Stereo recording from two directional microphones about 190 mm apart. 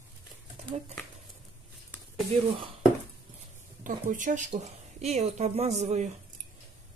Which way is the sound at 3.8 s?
45° right (ahead or behind).